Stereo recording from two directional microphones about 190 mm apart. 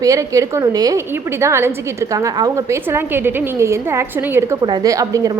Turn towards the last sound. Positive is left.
turn(degrees=-15)  # may be behind; listen again after turning